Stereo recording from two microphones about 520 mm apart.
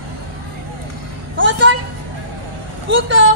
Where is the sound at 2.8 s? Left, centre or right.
Right.